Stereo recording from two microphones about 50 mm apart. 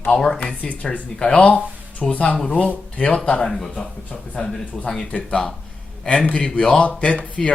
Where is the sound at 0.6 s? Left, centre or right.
Left.